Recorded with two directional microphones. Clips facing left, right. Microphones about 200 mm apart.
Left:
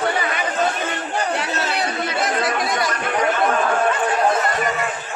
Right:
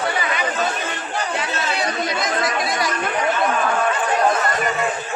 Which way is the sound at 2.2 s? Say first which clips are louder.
Left 3 dB; 60° left (ahead or behind).